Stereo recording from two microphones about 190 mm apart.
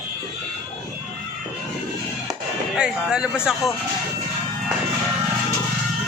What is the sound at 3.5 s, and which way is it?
Speech, 5° right (ahead or behind).